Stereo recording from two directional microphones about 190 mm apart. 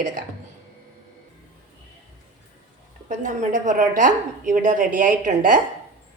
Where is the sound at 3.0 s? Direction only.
40° right (ahead or behind).